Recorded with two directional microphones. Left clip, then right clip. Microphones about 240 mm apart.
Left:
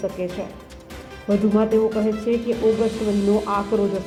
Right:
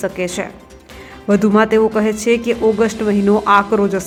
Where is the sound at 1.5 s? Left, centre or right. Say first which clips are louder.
Right 6 dB; right.